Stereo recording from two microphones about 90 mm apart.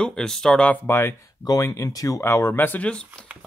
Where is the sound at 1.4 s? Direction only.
40° left (ahead or behind); by 3.0 s 15° left (ahead or behind).